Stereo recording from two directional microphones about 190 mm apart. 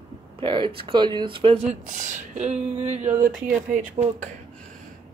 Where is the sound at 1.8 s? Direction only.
40° right (ahead or behind).